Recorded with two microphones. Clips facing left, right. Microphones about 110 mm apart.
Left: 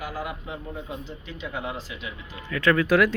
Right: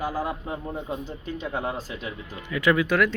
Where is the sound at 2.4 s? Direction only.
15° right (ahead or behind).